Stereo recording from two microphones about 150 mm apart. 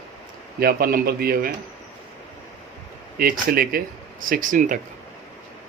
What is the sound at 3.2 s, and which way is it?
Speech, 75° right (ahead or behind).